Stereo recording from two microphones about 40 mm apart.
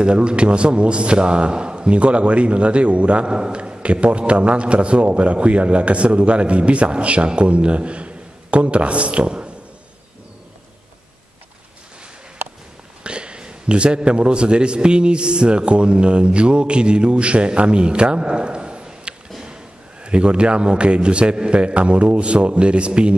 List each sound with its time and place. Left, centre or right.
0.0 s a man's voice: right
3.3 s a man's voice: right
13.0 s a man's voice: right